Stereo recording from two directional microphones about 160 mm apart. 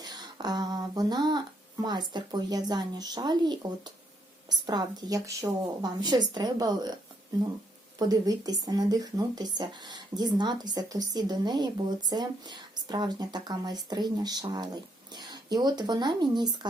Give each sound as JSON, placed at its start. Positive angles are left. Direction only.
{"t": 0.0, "sound": "a sound", "side_deg": -25}
{"t": 1.8, "sound": "speech", "side_deg": -25}
{"t": 7.9, "sound": "speech", "side_deg": -25}